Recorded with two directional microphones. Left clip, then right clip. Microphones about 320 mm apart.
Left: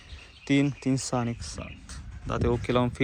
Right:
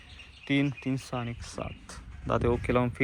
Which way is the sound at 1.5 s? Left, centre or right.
Centre.